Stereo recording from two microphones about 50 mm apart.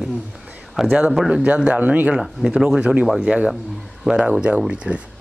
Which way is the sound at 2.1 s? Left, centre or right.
Centre.